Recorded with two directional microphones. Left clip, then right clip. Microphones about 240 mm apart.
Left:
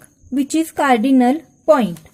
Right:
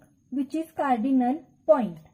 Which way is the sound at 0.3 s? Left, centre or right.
Left.